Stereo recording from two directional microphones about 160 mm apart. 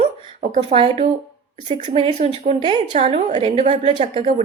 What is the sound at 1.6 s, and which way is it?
Speech, 45° right (ahead or behind).